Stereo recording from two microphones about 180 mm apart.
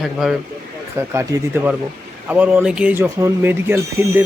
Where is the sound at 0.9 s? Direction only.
15° right (ahead or behind).